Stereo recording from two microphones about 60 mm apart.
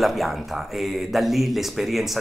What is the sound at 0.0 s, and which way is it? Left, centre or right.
Speech, centre.